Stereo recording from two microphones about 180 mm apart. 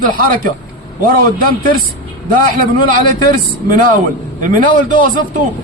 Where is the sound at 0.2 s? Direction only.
50° right (ahead or behind).